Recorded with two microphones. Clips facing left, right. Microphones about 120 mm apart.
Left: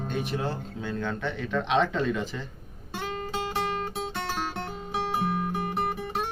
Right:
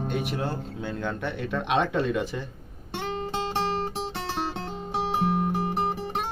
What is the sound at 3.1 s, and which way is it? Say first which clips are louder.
Music: right 2 dB; 30° right (ahead or behind).